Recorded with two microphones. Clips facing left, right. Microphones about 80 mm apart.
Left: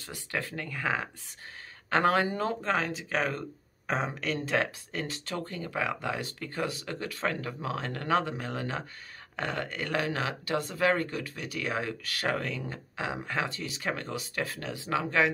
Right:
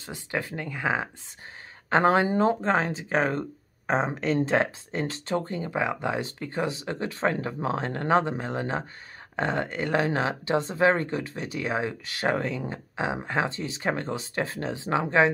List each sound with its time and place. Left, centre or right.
0.0 s speech: right